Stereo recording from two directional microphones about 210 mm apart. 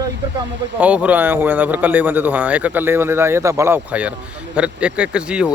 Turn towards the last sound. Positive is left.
turn(degrees=-5)  # may be behind; listen again after turning